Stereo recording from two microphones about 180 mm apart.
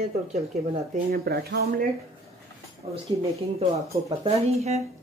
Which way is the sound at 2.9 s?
35° right (ahead or behind).